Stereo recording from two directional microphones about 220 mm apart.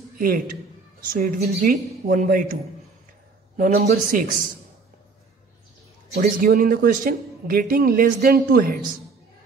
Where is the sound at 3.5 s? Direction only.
40° right (ahead or behind).